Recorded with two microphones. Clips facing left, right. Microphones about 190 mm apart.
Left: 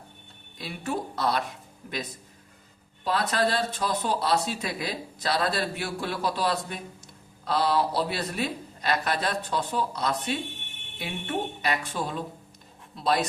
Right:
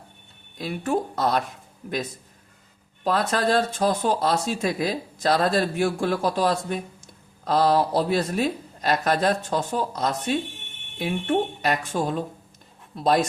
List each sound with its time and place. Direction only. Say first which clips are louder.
0.6 s speech: right 6 dB; 50° right (ahead or behind)
3.0 s speech: right 3 dB; 50° right (ahead or behind)